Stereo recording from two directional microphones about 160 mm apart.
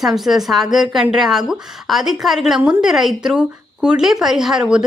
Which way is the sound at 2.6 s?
10° right (ahead or behind).